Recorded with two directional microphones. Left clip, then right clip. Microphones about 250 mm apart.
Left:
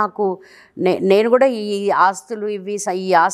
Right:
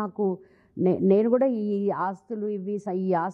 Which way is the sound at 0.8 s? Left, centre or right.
Centre.